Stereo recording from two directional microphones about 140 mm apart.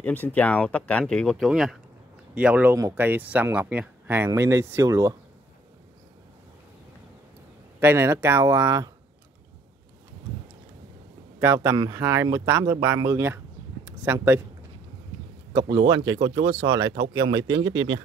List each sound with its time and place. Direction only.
0.0 s speech: 10° left (ahead or behind); by 5.1 s 25° right (ahead or behind)
7.8 s speech: 15° right (ahead or behind)
11.3 s speech: 20° right (ahead or behind)
15.5 s speech: 25° right (ahead or behind)